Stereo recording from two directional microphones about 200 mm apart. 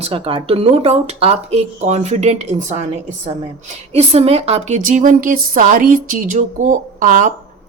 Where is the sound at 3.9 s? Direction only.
30° right (ahead or behind).